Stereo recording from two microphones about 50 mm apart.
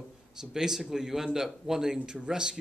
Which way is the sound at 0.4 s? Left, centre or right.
Centre.